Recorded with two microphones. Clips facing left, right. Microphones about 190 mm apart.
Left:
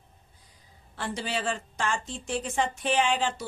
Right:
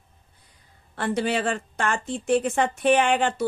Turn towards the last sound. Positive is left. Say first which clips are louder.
# right 5 dB
turn(degrees=-60)  # may be behind; listen again after turning